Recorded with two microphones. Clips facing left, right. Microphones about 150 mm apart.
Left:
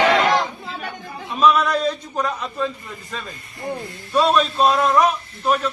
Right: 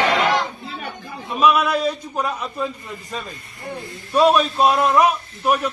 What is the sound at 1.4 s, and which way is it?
A man's voice, 10° right (ahead or behind).